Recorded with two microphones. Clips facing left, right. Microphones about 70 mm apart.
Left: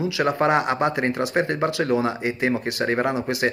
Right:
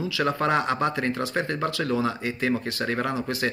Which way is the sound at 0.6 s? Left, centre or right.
Centre.